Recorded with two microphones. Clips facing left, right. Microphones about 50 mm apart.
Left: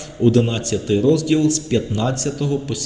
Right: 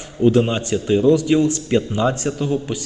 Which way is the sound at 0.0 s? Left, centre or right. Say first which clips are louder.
Even; centre.